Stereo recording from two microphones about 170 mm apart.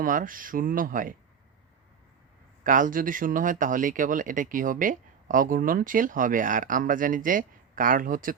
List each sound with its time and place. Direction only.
0.0 s speech: 55° right (ahead or behind)
2.6 s speech: 50° right (ahead or behind)